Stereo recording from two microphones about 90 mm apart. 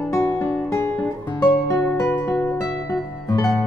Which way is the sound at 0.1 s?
35° left (ahead or behind).